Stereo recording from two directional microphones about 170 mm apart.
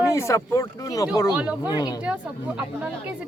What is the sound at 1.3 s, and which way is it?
Speech, 10° right (ahead or behind).